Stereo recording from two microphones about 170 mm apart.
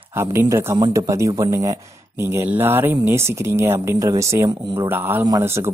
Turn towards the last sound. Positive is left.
turn(degrees=-15)  # may be behind; listen again after turning